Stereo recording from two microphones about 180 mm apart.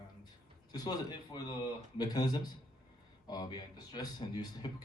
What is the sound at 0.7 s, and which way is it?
A man's voice, 20° left (ahead or behind).